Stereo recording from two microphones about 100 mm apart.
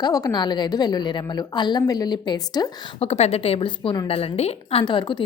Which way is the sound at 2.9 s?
90° left.